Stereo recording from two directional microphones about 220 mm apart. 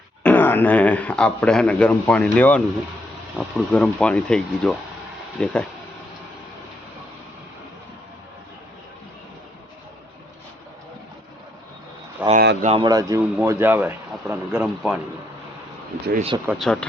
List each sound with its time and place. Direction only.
0.2 s speech: 10° left (ahead or behind)
12.3 s speech: 45° right (ahead or behind)
12.6 s speech: 20° right (ahead or behind); by 15.0 s 5° right (ahead or behind)
16.5 s speech: centre (ahead or behind)